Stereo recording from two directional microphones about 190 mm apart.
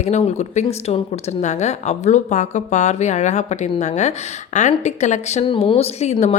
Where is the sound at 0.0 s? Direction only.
35° left (ahead or behind).